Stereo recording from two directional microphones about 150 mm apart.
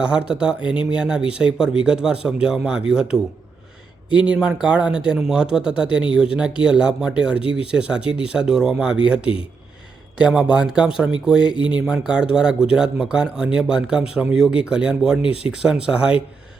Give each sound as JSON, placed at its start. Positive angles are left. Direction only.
{"t": 0.0, "sound": "speech", "side_deg": -5}
{"t": 4.2, "sound": "speech", "side_deg": -5}
{"t": 11.5, "sound": "speech", "side_deg": 30}
{"t": 11.9, "sound": "speech", "side_deg": -5}